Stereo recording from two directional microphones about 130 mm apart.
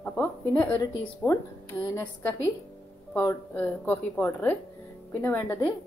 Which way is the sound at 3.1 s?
15° left (ahead or behind).